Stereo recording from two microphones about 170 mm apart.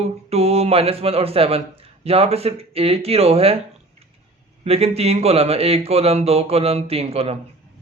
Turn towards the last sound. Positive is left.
turn(degrees=-35)  # may be behind; listen again after turning